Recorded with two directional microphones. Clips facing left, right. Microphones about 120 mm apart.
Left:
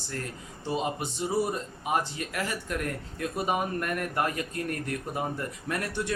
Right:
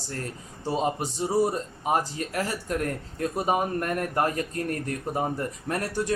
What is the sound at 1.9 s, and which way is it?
Speech, 35° right (ahead or behind).